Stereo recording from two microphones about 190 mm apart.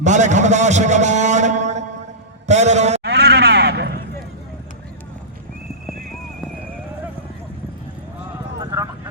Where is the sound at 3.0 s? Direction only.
60° right (ahead or behind).